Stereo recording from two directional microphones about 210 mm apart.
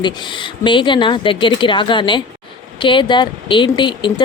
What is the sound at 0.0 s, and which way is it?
Speech, 20° left (ahead or behind).